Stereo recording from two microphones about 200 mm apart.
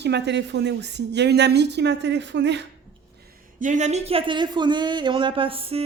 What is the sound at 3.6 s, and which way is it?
Speech, 35° right (ahead or behind).